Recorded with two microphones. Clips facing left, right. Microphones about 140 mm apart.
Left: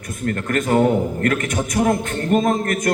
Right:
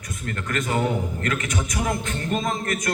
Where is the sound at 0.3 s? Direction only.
50° left (ahead or behind).